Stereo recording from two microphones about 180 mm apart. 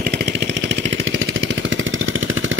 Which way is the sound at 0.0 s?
60° right (ahead or behind).